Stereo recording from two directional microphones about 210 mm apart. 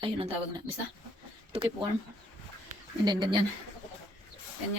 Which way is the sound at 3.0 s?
20° right (ahead or behind).